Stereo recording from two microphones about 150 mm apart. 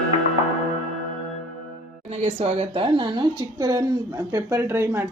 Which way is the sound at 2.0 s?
45° right (ahead or behind).